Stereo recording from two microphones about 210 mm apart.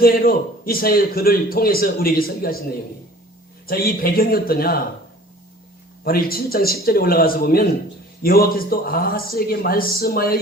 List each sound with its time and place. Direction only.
0.0 s a man's voice: 45° left (ahead or behind)
3.7 s a man's voice: 45° left (ahead or behind)
6.1 s a man's voice: 45° left (ahead or behind)